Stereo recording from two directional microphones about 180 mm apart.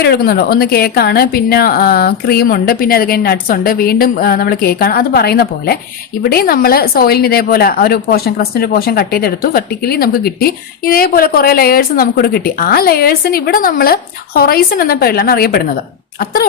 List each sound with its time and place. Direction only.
0.0 s a woman's voice: 60° left (ahead or behind)